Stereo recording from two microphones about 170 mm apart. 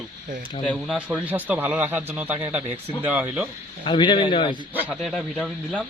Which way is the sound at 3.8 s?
30° left (ahead or behind).